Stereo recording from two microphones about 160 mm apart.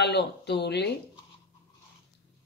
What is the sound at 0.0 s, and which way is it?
Speech, 90° left.